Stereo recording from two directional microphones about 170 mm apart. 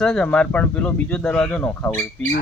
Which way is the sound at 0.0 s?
5° left (ahead or behind).